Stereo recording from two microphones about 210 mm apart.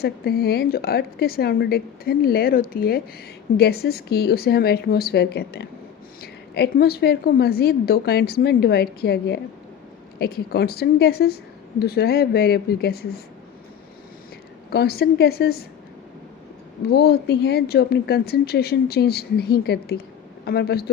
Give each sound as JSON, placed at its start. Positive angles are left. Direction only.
{"t": 0.0, "sound": "speech", "side_deg": 50}
{"t": 14.7, "sound": "speech", "side_deg": 50}
{"t": 16.9, "sound": "speech", "side_deg": 50}